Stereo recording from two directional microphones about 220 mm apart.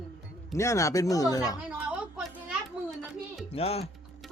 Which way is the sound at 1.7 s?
5° right (ahead or behind).